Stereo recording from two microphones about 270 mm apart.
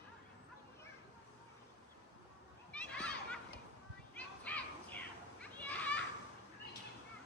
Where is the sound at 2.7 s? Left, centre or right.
Centre.